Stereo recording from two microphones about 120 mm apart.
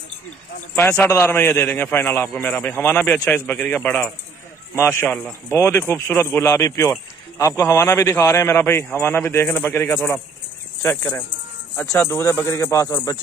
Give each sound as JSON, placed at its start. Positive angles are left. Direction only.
{"t": 0.7, "sound": "a man's voice", "side_deg": 15}